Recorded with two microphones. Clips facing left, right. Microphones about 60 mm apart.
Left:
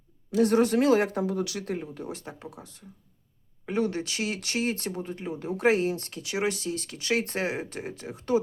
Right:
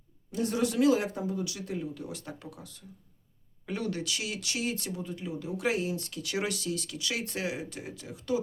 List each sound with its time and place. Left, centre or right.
0.3 s speech: left
0.5 s speech: left
1.1 s speech: left
6.2 s speech: left